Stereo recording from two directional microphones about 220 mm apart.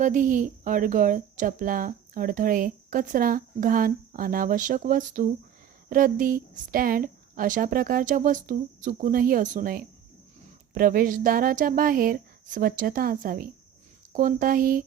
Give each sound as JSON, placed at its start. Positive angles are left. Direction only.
{"t": 0.0, "sound": "a woman's voice", "side_deg": -35}